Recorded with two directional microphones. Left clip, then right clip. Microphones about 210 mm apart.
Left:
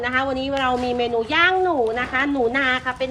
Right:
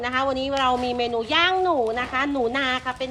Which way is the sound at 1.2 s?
15° right (ahead or behind).